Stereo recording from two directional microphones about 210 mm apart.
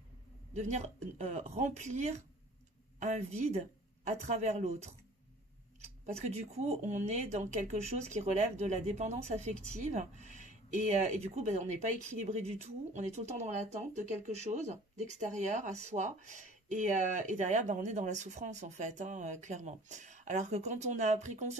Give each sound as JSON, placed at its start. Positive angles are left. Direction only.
{"t": 0.6, "sound": "speech", "side_deg": -35}
{"t": 6.0, "sound": "speech", "side_deg": -30}